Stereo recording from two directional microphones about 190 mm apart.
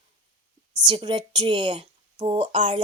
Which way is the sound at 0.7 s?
20° right (ahead or behind).